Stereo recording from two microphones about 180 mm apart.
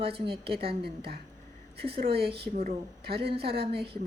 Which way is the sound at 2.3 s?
35° right (ahead or behind).